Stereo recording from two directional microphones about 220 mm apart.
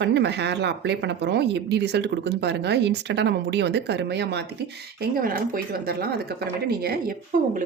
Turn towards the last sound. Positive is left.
turn(degrees=-40)  # may be behind; listen again after turning